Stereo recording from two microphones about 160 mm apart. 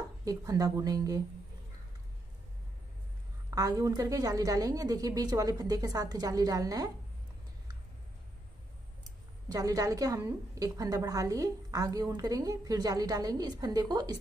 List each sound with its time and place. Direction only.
0.2 s a woman's voice: 20° right (ahead or behind)
3.4 s a woman's voice: 20° right (ahead or behind)
9.5 s a woman's voice: 20° right (ahead or behind)